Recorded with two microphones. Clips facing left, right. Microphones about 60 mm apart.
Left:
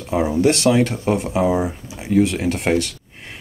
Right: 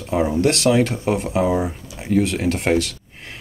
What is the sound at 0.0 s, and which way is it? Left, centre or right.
Speech, centre.